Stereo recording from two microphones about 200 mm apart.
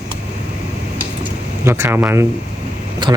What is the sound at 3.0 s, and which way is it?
Speech, 25° right (ahead or behind).